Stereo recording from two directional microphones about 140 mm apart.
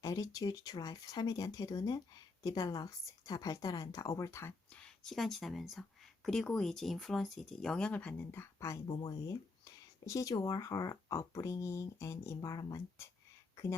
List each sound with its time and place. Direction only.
0.0 s speech: 25° left (ahead or behind)
4.8 s speech: 5° left (ahead or behind); by 8.8 s 20° left (ahead or behind)
8.9 s speech: 30° left (ahead or behind)